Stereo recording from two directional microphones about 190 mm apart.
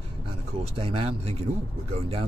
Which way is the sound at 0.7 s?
30° right (ahead or behind).